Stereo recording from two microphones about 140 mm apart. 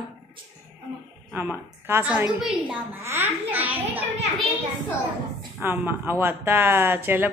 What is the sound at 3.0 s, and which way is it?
Speech, 15° right (ahead or behind).